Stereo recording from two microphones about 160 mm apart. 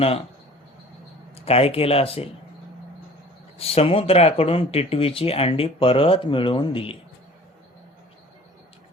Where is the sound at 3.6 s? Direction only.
40° left (ahead or behind).